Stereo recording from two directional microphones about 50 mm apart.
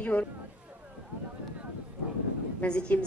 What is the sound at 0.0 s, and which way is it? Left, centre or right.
Speech, left.